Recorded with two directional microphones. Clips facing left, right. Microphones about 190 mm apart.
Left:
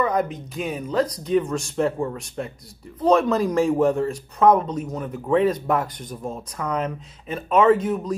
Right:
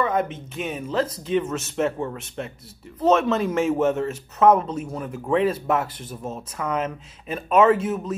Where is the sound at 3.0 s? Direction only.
Centre (ahead or behind).